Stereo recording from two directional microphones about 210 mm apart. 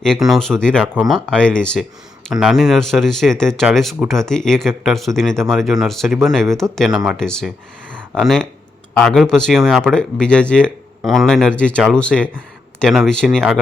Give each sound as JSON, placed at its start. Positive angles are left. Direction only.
{"t": 0.0, "sound": "speech", "side_deg": 0}